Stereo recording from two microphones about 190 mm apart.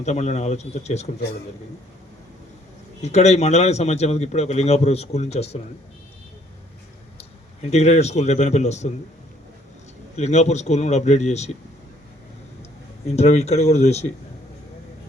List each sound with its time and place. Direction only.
0.0 s a man's voice: 35° left (ahead or behind)
3.0 s a man's voice: 35° left (ahead or behind)
7.7 s a man's voice: 35° left (ahead or behind)
10.2 s a man's voice: 35° left (ahead or behind)
13.1 s a man's voice: 35° left (ahead or behind)